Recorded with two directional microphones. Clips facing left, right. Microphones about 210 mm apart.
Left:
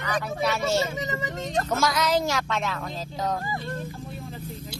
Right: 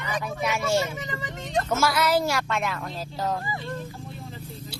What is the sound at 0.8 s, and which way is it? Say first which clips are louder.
Speech: left 3 dB; 20° left (ahead or behind).